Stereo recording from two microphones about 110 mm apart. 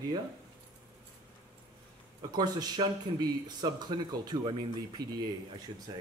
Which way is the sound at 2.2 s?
40° right (ahead or behind).